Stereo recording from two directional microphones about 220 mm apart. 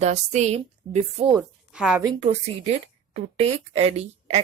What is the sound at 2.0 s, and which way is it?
A woman's voice, 20° right (ahead or behind).